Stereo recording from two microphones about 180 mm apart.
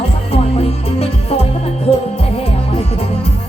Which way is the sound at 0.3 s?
35° left (ahead or behind).